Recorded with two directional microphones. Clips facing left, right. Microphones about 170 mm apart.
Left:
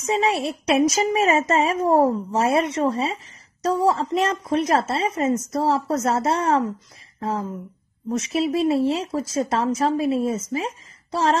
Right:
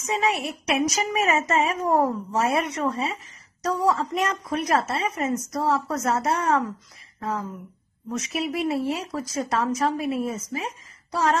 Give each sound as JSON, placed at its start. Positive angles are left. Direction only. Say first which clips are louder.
{"t": 0.0, "sound": "speech", "louder": "left 4 dB", "side_deg": 30}